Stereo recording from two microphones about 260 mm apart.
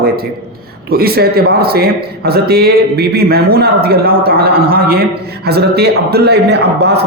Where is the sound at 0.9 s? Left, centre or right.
Right.